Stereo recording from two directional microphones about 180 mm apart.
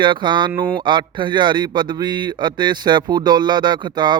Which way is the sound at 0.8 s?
25° right (ahead or behind).